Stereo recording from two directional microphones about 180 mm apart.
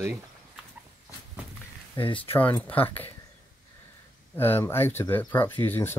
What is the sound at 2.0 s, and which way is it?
Speech, 30° left (ahead or behind).